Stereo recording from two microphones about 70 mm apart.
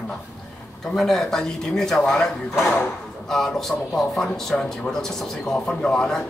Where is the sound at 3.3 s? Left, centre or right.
Centre.